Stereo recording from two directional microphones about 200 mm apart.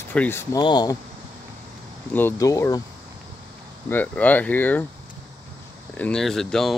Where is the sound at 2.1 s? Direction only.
10° left (ahead or behind).